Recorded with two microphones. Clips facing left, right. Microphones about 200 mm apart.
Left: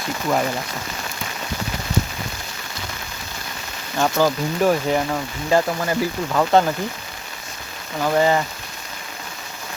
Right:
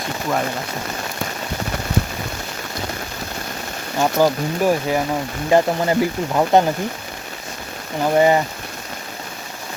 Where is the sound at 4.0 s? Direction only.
15° right (ahead or behind).